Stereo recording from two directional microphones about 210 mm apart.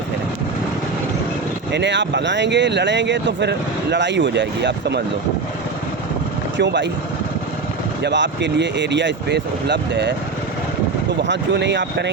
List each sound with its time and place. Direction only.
1.7 s speech: 55° right (ahead or behind)
6.6 s speech: 55° right (ahead or behind)
8.0 s speech: 55° right (ahead or behind)
11.2 s speech: 55° right (ahead or behind)